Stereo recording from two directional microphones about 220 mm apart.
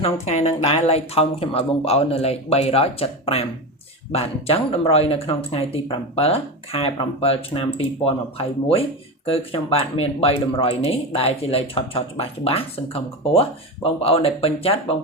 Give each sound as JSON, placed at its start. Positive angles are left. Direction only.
{"t": 0.0, "sound": "speech", "side_deg": 30}